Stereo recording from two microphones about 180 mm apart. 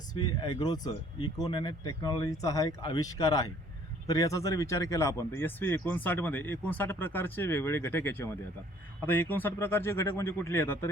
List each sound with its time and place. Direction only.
0.1 s speech: 25° left (ahead or behind)